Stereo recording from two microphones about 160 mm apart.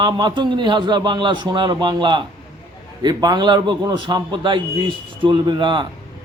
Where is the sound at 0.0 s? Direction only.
25° right (ahead or behind).